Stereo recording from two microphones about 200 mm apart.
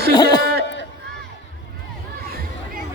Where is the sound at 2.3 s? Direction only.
45° right (ahead or behind).